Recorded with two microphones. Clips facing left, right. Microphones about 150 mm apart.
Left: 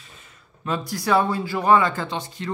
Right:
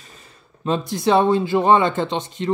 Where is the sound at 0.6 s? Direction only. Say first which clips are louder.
Right 4 dB; 25° right (ahead or behind).